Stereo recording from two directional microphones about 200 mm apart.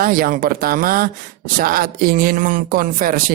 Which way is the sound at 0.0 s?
45° right (ahead or behind).